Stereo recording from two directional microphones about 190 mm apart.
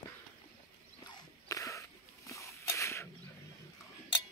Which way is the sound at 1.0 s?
20° left (ahead or behind).